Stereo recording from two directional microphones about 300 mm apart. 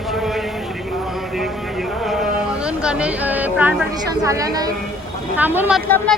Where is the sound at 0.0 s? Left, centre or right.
Centre.